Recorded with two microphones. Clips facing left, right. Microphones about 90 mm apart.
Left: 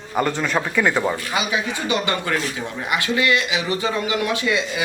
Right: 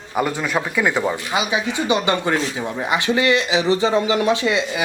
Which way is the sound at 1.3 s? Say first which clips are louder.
Right 2 dB; 20° right (ahead or behind).